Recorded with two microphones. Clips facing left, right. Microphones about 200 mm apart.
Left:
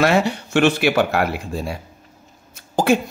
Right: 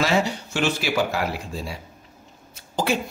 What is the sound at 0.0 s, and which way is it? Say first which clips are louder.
A man's voice: left 5 dB; 60° left (ahead or behind).